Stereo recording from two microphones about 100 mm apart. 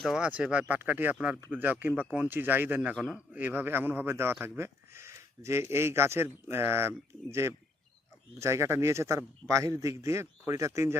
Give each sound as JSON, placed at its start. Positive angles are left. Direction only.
{"t": 0.2, "sound": "speech", "side_deg": -10}